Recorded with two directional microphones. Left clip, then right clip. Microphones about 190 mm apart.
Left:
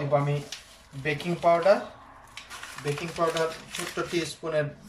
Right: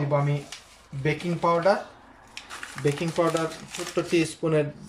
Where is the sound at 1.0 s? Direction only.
30° right (ahead or behind).